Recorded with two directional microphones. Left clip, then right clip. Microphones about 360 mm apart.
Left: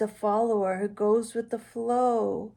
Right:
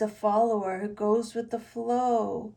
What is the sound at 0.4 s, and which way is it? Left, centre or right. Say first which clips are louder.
Speech: left 1 dB; centre.